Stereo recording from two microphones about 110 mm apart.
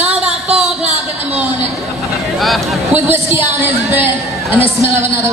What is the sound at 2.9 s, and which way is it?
A woman's voice, 20° right (ahead or behind).